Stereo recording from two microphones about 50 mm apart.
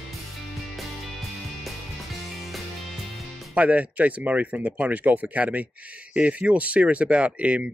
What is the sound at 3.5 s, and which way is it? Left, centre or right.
Speech, right.